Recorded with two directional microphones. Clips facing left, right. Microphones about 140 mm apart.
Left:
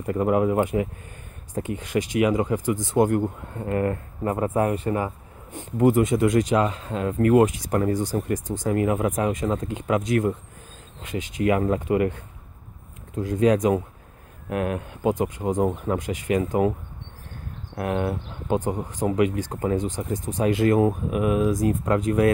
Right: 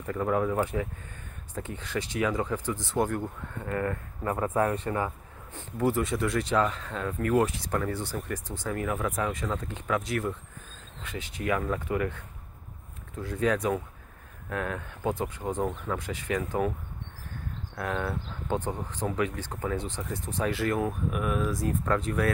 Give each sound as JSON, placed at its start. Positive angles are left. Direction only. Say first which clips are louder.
{"t": 0.0, "sound": "speech", "louder": "left 6 dB", "side_deg": 20}
{"t": 4.9, "sound": "speech", "louder": "left 4 dB", "side_deg": 15}
{"t": 13.1, "sound": "speech", "louder": "left 7 dB", "side_deg": 20}
{"t": 17.7, "sound": "speech", "louder": "left 6 dB", "side_deg": 20}